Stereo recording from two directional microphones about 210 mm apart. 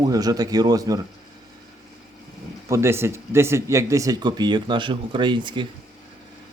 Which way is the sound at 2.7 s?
10° right (ahead or behind).